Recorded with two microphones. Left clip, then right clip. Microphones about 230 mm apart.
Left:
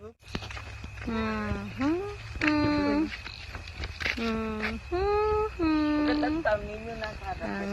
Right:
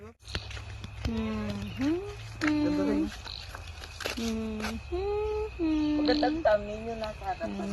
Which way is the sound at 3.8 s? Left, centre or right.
Right.